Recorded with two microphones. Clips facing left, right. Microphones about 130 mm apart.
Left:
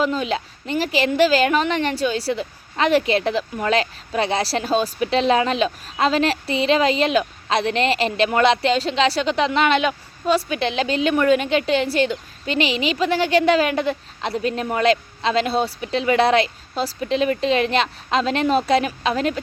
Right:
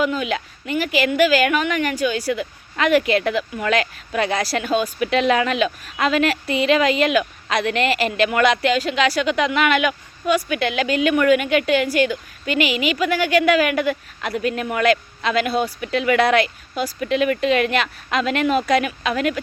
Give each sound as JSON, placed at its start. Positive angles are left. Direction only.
{"t": 0.0, "sound": "a woman's voice", "side_deg": 30}